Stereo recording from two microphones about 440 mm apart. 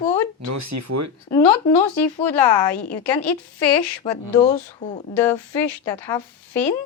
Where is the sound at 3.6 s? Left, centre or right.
Left.